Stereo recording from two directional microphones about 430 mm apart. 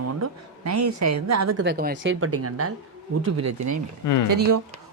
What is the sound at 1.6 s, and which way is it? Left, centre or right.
Speech, right.